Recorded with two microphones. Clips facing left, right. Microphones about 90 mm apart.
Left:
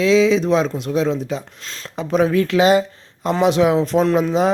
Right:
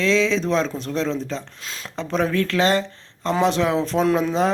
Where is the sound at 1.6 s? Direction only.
5° right (ahead or behind).